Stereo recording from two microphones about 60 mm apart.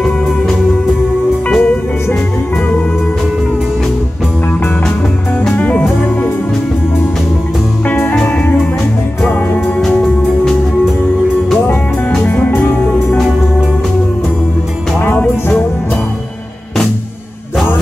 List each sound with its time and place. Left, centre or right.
1.5 s music: left
5.6 s music: left
12.3 s music: left
15.0 s music: left